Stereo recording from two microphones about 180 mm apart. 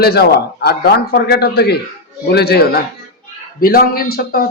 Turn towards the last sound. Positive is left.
turn(degrees=55)  # may be behind; listen again after turning